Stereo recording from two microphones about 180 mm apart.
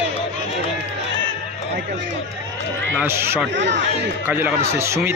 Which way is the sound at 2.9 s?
15° right (ahead or behind).